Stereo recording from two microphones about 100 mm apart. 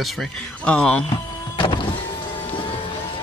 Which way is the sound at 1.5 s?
55° left (ahead or behind).